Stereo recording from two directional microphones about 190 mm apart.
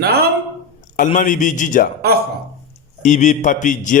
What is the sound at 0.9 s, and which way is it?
Speech, 45° left (ahead or behind).